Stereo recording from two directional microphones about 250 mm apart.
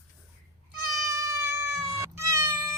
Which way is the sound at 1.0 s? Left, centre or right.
Centre.